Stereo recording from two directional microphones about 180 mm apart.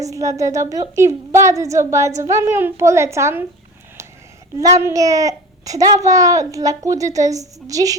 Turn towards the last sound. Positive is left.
turn(degrees=-20)  # may be behind; listen again after turning